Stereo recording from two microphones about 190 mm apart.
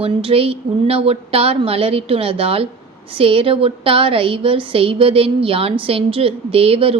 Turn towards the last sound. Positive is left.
turn(degrees=-30)  # may be behind; listen again after turning